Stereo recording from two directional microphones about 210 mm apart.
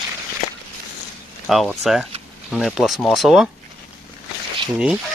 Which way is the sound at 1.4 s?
Centre (ahead or behind).